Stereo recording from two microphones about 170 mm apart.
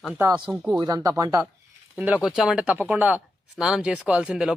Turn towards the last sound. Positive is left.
turn(degrees=-5)  # may be behind; listen again after turning